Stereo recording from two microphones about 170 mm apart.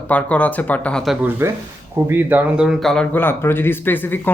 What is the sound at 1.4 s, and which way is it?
Speech, 15° right (ahead or behind).